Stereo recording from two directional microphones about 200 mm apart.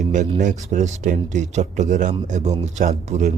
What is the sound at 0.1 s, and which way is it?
Speech, 40° right (ahead or behind).